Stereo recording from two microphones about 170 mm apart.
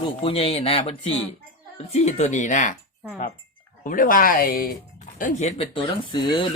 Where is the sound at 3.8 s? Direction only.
55° left (ahead or behind).